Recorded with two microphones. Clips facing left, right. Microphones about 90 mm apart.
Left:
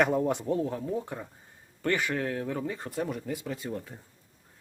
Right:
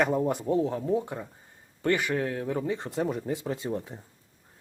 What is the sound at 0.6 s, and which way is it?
Speech, 20° right (ahead or behind).